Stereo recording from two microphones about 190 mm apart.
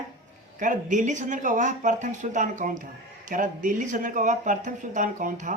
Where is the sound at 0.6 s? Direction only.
40° right (ahead or behind).